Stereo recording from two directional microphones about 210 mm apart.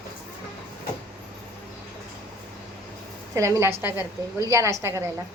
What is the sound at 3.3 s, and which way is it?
A woman's voice, 15° right (ahead or behind).